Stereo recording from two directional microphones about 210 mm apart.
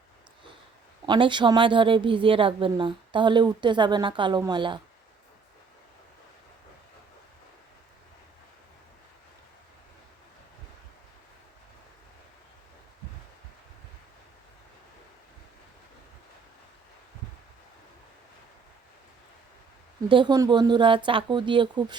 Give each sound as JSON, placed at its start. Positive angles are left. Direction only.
{"t": 1.0, "sound": "a woman's voice", "side_deg": -20}
{"t": 20.1, "sound": "a woman's voice", "side_deg": -20}